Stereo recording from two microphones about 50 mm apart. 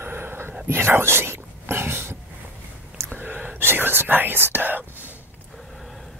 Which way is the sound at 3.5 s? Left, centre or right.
Right.